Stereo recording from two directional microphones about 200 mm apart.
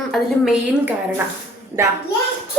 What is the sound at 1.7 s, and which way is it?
Speech, 25° right (ahead or behind).